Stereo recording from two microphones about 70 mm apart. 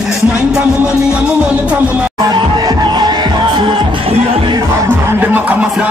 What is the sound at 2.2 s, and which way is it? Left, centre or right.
Music, right.